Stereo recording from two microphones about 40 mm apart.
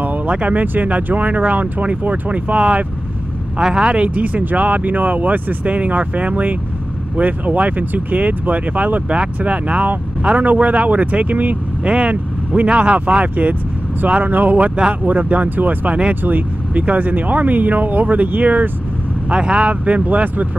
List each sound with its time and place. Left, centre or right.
0.3 s speech: right
3.5 s speech: right
3.9 s speech: right
14.2 s speech: right
19.2 s speech: right